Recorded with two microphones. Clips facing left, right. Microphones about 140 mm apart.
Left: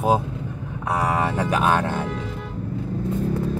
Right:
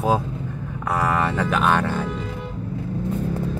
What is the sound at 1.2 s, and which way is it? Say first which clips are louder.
Speech: even; 15° left (ahead or behind).